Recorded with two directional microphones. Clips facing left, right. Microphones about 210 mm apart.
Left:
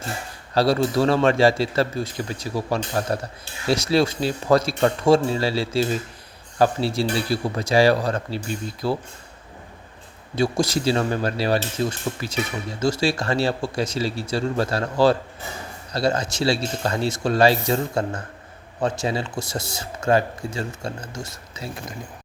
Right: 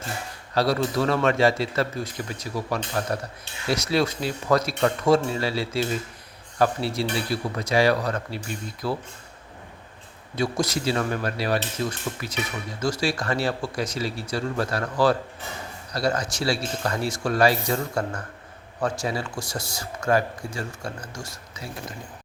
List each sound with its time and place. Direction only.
0.5 s a man's voice: 30° left (ahead or behind)
10.3 s speech: 30° left (ahead or behind)